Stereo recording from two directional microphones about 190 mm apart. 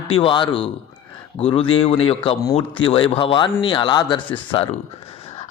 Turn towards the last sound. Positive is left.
turn(degrees=30)  # may be behind; listen again after turning